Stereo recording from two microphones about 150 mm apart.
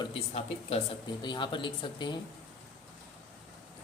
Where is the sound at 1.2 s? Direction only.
30° left (ahead or behind).